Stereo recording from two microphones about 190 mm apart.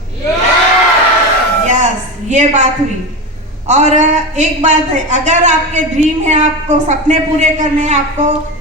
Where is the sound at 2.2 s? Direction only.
40° right (ahead or behind).